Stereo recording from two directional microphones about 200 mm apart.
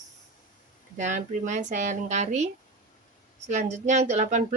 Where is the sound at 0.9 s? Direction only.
40° right (ahead or behind).